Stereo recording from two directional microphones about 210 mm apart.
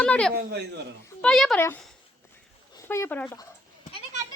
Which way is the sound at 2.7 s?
15° left (ahead or behind).